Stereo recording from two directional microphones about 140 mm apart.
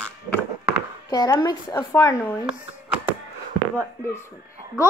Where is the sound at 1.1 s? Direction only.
30° left (ahead or behind).